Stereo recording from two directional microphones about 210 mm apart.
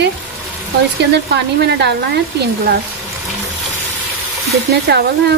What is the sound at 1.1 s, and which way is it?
Speech, 50° right (ahead or behind).